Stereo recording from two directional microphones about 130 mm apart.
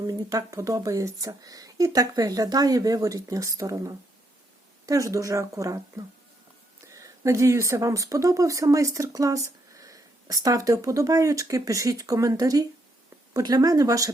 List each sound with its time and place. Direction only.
0.1 s speech: 30° right (ahead or behind)